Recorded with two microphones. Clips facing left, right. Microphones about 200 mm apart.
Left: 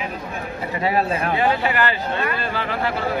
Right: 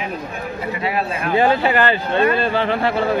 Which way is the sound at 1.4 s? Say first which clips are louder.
Right 7 dB; 30° right (ahead or behind).